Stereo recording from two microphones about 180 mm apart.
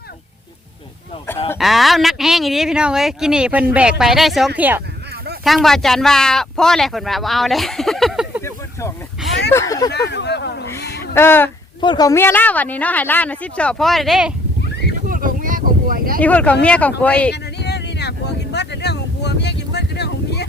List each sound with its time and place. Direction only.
1.5 s speech: centre (ahead or behind)
8.4 s a sound: 15° left (ahead or behind)
9.5 s speech: 15° left (ahead or behind)
10.1 s a sound: 70° left (ahead or behind)
11.1 s speech: 10° left (ahead or behind)
11.8 s speech: 25° left (ahead or behind); by 14.3 s 5° right (ahead or behind)
15.1 s a sound: 50° right (ahead or behind)
16.2 s speech: 10° left (ahead or behind)
17.3 s vehicle: 65° left (ahead or behind)